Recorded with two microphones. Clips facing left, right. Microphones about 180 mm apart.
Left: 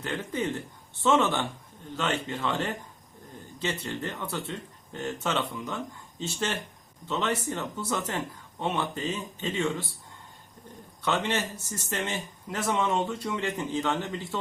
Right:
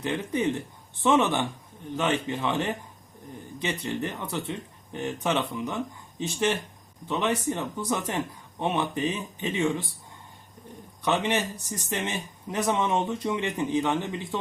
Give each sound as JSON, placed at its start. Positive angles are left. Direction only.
{"t": 0.0, "sound": "speech", "side_deg": -15}
{"t": 11.0, "sound": "speech", "side_deg": -15}